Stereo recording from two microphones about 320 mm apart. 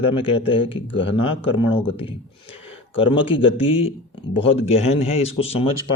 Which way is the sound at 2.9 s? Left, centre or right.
Centre.